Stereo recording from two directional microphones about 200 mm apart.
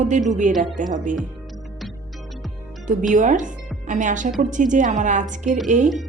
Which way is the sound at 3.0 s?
40° right (ahead or behind).